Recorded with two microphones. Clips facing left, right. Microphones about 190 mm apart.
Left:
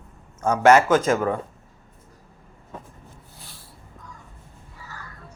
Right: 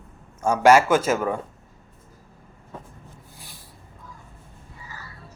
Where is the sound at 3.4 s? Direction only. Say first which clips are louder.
Even; 15° right (ahead or behind).